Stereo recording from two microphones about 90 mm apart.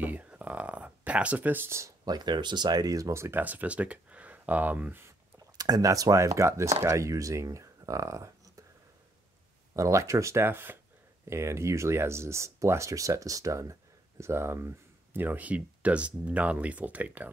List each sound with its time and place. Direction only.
0.0 s speech: 15° right (ahead or behind); by 2.0 s 30° right (ahead or behind)
2.0 s speech: 50° right (ahead or behind); by 5.1 s 20° right (ahead or behind)
5.6 s speech: 45° right (ahead or behind)
9.8 s speech: 35° right (ahead or behind); by 17.3 s 20° right (ahead or behind)